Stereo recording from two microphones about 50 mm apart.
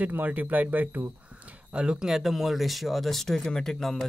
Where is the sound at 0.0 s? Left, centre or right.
Right.